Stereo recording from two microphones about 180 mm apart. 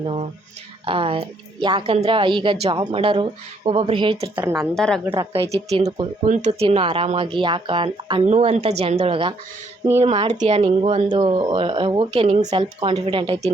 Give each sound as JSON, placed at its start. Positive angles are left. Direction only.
{"t": 0.0, "sound": "speech", "side_deg": -30}
{"t": 4.7, "sound": "a woman's voice", "side_deg": 5}
{"t": 5.2, "sound": "speech", "side_deg": -30}
{"t": 8.2, "sound": "speech", "side_deg": -35}